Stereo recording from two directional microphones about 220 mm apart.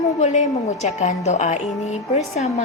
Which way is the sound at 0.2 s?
30° left (ahead or behind).